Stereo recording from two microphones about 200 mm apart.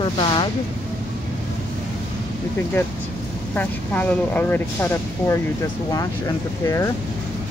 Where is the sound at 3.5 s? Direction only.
10° left (ahead or behind).